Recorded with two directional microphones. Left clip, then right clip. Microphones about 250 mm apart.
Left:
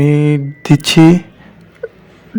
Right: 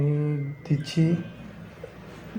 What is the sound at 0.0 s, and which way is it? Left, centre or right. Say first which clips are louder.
Speech: left 16 dB; left.